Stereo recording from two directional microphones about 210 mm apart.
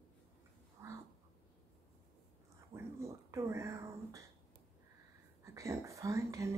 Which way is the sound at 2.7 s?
15° right (ahead or behind).